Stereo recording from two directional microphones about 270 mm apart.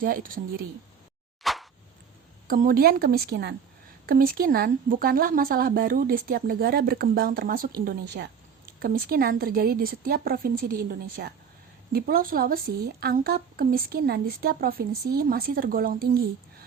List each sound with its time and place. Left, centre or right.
0.0 s speech: right
1.4 s a sound: centre
2.5 s speech: right